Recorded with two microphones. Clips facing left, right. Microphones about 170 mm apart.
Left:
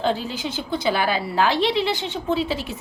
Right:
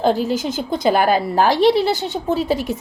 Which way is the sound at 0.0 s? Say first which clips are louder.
Right 6 dB; 40° right (ahead or behind).